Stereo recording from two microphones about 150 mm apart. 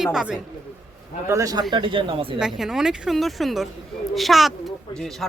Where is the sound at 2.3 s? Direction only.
5° right (ahead or behind).